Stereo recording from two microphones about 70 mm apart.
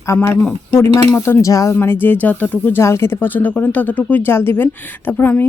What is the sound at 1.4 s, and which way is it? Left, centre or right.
Speech, left.